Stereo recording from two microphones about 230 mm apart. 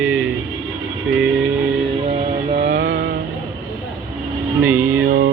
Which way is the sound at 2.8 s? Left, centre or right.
Right.